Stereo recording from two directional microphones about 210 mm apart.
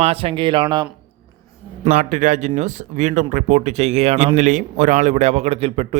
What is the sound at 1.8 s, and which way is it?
Speech, 35° right (ahead or behind).